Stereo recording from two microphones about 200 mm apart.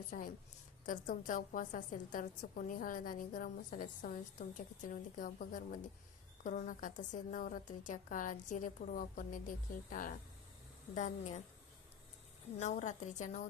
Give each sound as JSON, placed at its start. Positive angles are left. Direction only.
{"t": 0.1, "sound": "a woman's voice", "side_deg": 45}
{"t": 12.5, "sound": "a woman's voice", "side_deg": 35}